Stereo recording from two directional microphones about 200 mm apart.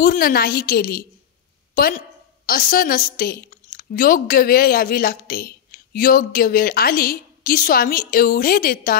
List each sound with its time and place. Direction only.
0.0 s a woman's voice: 45° left (ahead or behind)
2.4 s a woman's voice: 45° left (ahead or behind)